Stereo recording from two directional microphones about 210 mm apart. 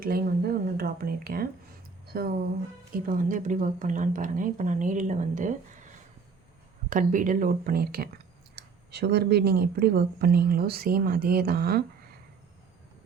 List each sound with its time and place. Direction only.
0.0 s speech: 45° right (ahead or behind)
6.9 s speech: 40° right (ahead or behind)